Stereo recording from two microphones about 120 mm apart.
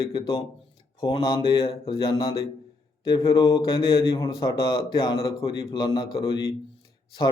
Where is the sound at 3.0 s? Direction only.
40° left (ahead or behind).